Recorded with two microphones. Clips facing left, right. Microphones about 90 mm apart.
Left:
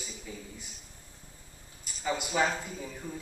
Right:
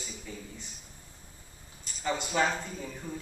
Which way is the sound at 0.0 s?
5° left (ahead or behind).